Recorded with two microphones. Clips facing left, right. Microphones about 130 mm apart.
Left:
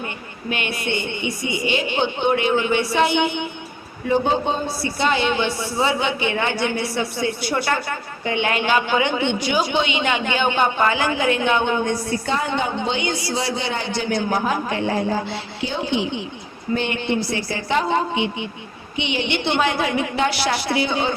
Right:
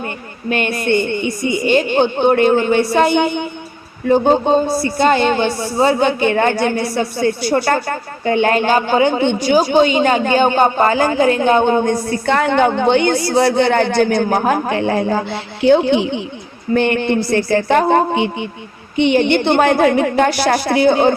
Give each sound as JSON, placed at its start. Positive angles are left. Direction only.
{"t": 0.5, "sound": "a woman's voice", "side_deg": -45}
{"t": 12.1, "sound": "a man's voice", "side_deg": -65}